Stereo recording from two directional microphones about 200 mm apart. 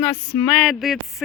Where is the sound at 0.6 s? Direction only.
Centre (ahead or behind).